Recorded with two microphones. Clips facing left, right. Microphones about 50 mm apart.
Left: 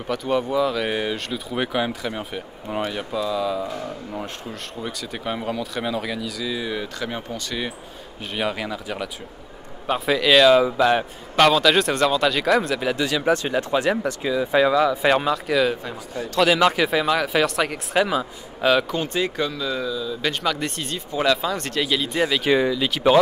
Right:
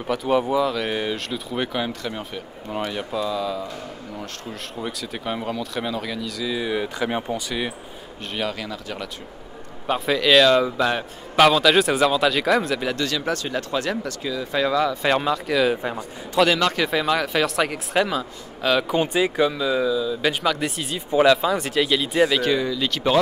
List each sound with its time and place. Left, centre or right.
0.0 s a man's voice: centre
8.4 s a man's voice: centre
15.7 s a man's voice: right
16.5 s a man's voice: centre
18.9 s a man's voice: centre
22.5 s speech: left
22.8 s speech: centre